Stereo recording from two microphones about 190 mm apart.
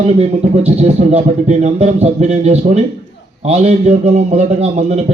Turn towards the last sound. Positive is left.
turn(degrees=-35)  # may be behind; listen again after turning